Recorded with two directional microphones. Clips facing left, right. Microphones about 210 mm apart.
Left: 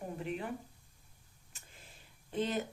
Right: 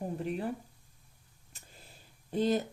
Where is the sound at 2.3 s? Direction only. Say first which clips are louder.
Right 6 dB; 35° right (ahead or behind).